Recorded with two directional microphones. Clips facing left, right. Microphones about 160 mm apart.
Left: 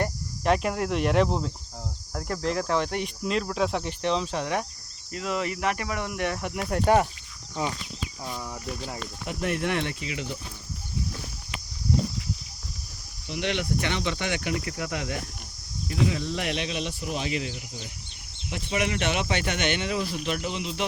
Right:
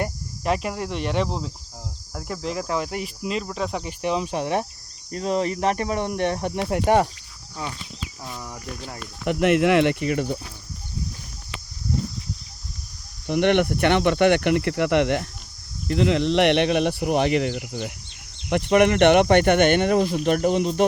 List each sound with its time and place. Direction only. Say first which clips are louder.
0.0 s speech: even; centre (ahead or behind); by 4.6 s 20° right (ahead or behind)
5.1 s speech: right 6 dB; 35° right (ahead or behind)
7.6 s speech: left 3 dB; 25° left (ahead or behind)
8.2 s speech: left 1 dB; centre (ahead or behind)
9.2 s speech: right 10 dB; 75° right (ahead or behind); by 10.3 s 50° right (ahead or behind)
13.2 s speech: right 10 dB; 60° right (ahead or behind); by 17.9 s 75° right (ahead or behind)
18.4 s speech: right 11 dB; 65° right (ahead or behind)